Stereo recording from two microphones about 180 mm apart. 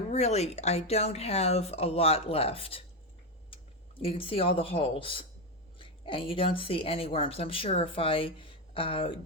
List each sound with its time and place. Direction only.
0.1 s speech: 40° left (ahead or behind)